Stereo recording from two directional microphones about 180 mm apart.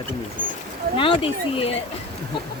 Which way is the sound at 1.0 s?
30° left (ahead or behind).